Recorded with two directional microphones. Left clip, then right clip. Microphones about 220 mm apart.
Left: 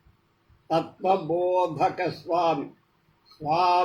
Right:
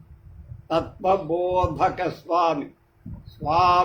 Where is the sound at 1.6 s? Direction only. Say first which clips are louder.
Right 2 dB; 10° right (ahead or behind).